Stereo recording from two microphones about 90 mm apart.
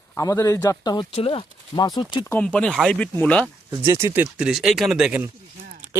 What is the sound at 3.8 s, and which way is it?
Speech, 35° right (ahead or behind).